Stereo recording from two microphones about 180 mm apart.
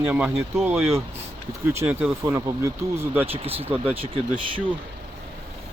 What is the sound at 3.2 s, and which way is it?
Speech, 30° right (ahead or behind).